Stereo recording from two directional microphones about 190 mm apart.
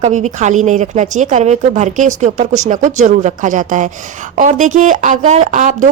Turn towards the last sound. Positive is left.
turn(degrees=-40)  # may be behind; listen again after turning